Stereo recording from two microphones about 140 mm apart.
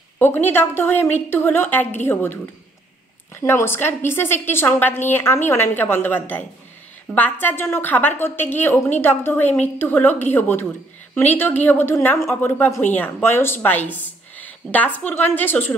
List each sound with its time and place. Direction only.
0.2 s a woman's voice: 15° left (ahead or behind)
3.3 s a woman's voice: 20° left (ahead or behind)